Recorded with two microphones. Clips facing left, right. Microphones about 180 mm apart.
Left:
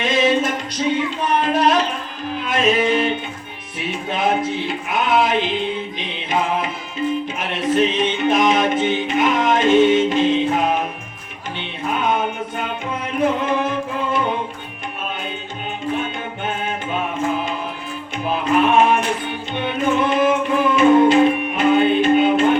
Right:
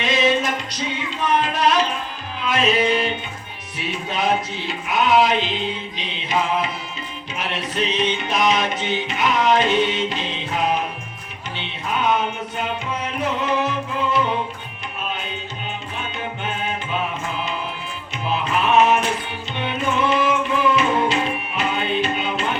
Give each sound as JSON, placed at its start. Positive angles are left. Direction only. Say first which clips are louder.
{"t": 0.0, "sound": "music", "louder": "left 2 dB", "side_deg": 50}
{"t": 1.4, "sound": "a sound", "louder": "left 4 dB", "side_deg": 50}
{"t": 2.4, "sound": "music", "louder": "left 1 dB", "side_deg": 50}
{"t": 3.8, "sound": "speech", "louder": "left 2 dB", "side_deg": 55}
{"t": 6.0, "sound": "mantra", "louder": "right 1 dB", "side_deg": 55}
{"t": 7.3, "sound": "music", "louder": "left 3 dB", "side_deg": 50}
{"t": 18.3, "sound": "music", "louder": "left 4 dB", "side_deg": 50}